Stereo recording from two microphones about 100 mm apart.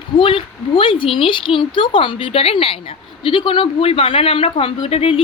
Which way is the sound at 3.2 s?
60° left (ahead or behind).